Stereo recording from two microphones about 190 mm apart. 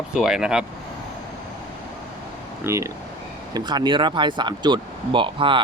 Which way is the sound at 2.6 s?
15° right (ahead or behind).